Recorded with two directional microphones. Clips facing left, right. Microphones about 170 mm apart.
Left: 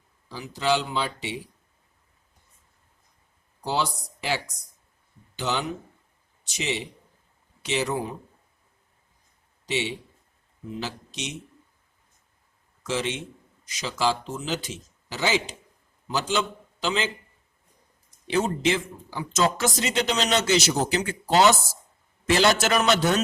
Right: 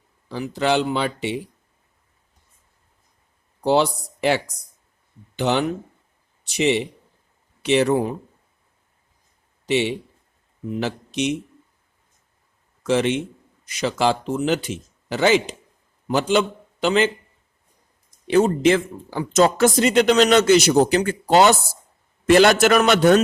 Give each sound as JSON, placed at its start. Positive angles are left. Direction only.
{"t": 0.3, "sound": "speech", "side_deg": -60}
{"t": 3.6, "sound": "speech", "side_deg": -60}
{"t": 5.4, "sound": "a man's voice", "side_deg": -60}
{"t": 9.6, "sound": "speech", "side_deg": -60}
{"t": 12.8, "sound": "a man's voice", "side_deg": -60}
{"t": 18.3, "sound": "speech", "side_deg": -55}